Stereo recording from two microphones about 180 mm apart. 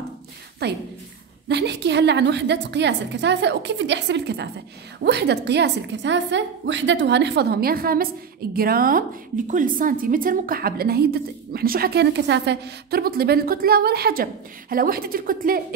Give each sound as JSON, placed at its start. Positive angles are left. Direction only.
{"t": 0.6, "sound": "a woman's voice", "side_deg": -65}